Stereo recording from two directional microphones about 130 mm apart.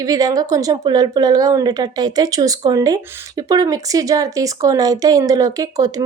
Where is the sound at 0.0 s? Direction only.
30° right (ahead or behind).